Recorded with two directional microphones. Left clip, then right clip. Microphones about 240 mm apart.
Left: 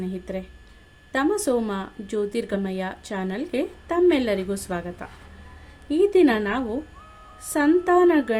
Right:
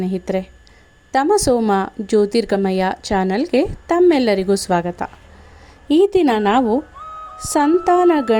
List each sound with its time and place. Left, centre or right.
0.0 s a woman's voice: right